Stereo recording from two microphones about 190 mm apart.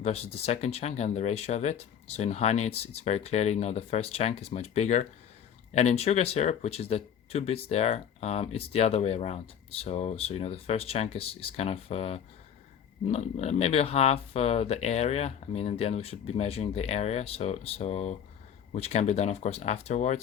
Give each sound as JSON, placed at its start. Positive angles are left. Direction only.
{"t": 0.0, "sound": "speech", "side_deg": 35}